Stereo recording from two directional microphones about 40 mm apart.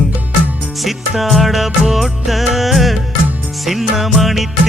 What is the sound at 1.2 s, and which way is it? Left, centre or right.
Music, centre.